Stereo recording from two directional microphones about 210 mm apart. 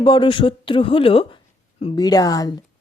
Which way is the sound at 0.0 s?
20° left (ahead or behind).